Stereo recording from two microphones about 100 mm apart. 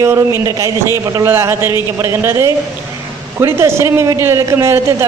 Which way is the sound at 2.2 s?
30° right (ahead or behind).